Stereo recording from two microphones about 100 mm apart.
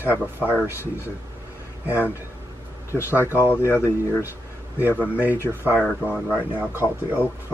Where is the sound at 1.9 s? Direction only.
15° right (ahead or behind).